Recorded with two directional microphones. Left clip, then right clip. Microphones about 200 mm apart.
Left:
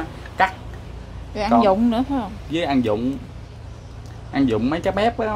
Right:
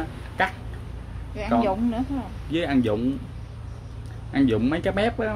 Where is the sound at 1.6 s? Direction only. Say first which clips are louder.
Left 8 dB; 40° left (ahead or behind).